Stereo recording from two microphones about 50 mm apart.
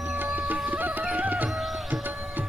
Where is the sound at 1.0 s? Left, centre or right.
Right.